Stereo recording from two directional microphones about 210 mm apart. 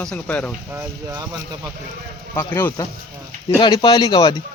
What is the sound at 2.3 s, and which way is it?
A man's voice, 10° left (ahead or behind).